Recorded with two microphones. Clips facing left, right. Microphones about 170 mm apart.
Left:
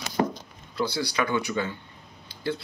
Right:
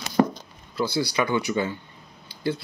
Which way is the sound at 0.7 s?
10° right (ahead or behind).